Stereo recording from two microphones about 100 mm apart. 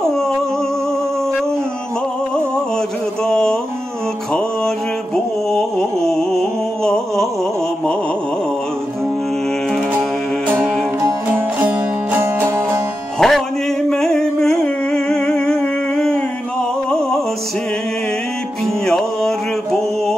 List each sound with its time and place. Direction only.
3.3 s a sound: 5° left (ahead or behind)
4.3 s music: 5° left (ahead or behind)
10.6 s music: 5° left (ahead or behind)
11.3 s music: 20° right (ahead or behind)
13.2 s music: 5° left (ahead or behind)
18.9 s a sound: 5° left (ahead or behind)